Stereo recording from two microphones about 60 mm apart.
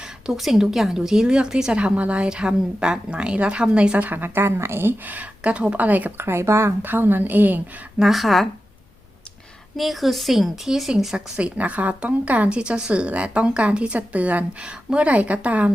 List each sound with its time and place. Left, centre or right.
0.0 s a woman's voice: centre; by 6.1 s right
6.1 s speech: right
6.8 s a woman's voice: right
7.9 s a woman's voice: centre
9.7 s a woman's voice: centre
11.3 s speech: right